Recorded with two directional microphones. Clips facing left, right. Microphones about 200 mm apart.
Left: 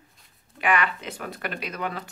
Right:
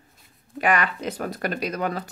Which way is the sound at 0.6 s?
40° right (ahead or behind).